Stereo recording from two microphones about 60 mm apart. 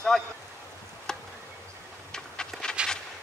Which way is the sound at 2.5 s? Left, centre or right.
Centre.